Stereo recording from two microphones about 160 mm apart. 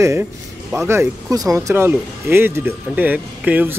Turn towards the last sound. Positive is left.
turn(degrees=-10)  # may be behind; listen again after turning